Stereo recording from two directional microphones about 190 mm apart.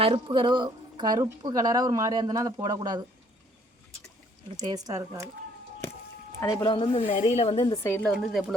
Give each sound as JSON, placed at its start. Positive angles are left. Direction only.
{"t": 0.0, "sound": "speech", "side_deg": -30}
{"t": 4.5, "sound": "speech", "side_deg": -20}
{"t": 6.4, "sound": "speech", "side_deg": 20}
{"t": 7.9, "sound": "speech", "side_deg": 10}
{"t": 8.1, "sound": "speech", "side_deg": 0}